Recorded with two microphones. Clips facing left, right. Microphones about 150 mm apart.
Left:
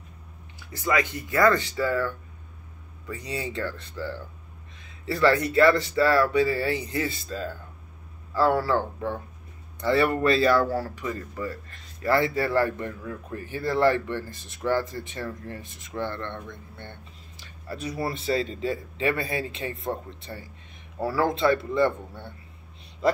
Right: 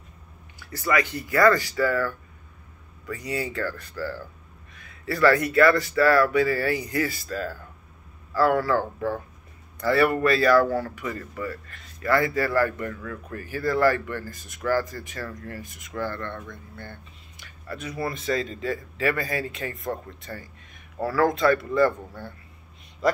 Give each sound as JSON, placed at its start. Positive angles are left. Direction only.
{"t": 0.7, "sound": "speech", "side_deg": 20}
{"t": 3.2, "sound": "speech", "side_deg": 25}
{"t": 8.7, "sound": "speech", "side_deg": 0}
{"t": 9.8, "sound": "a man's voice", "side_deg": 25}